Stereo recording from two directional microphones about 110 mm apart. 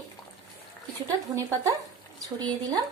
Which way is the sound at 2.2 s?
35° right (ahead or behind).